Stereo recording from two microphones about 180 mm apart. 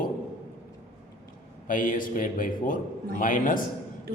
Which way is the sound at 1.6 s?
50° left (ahead or behind).